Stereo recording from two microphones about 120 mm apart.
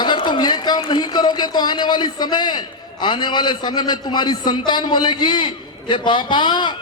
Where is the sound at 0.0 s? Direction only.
40° left (ahead or behind).